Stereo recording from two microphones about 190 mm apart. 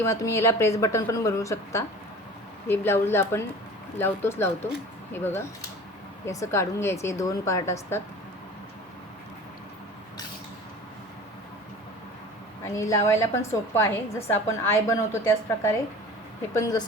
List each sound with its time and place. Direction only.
0.0 s a woman's voice: 15° left (ahead or behind)
12.6 s a woman's voice: 15° left (ahead or behind)